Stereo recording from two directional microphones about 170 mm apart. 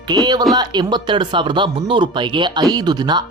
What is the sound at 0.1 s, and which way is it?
Speech, 25° right (ahead or behind).